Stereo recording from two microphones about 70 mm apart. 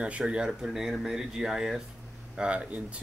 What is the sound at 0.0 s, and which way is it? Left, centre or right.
Speech, centre.